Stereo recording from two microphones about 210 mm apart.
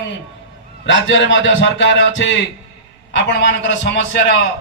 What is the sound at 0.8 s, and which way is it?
A man's voice, 60° left (ahead or behind).